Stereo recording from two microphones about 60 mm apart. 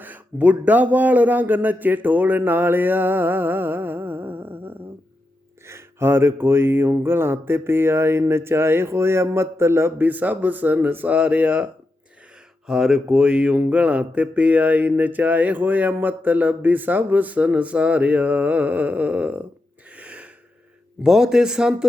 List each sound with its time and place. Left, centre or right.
0.0 s speech: right
5.6 s a man's voice: right
10.0 s speech: right
12.6 s speech: centre; by 19.5 s right
20.0 s gasp: right
21.0 s speech: centre